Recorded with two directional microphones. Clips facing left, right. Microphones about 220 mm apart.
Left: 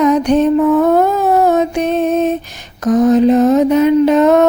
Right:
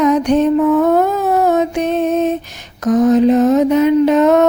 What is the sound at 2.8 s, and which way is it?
Mantra, 35° left (ahead or behind).